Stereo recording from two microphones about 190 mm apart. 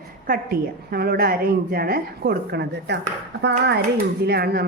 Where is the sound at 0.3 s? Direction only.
50° right (ahead or behind).